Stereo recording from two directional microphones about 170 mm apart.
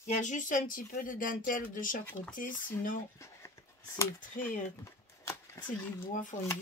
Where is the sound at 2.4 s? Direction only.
50° left (ahead or behind).